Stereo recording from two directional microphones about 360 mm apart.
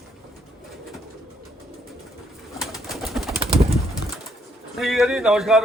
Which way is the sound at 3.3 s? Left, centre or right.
Centre.